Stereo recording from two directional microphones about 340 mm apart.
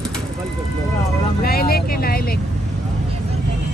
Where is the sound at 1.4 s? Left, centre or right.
Left.